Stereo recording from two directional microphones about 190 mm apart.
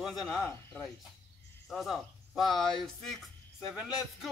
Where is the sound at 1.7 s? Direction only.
Centre (ahead or behind).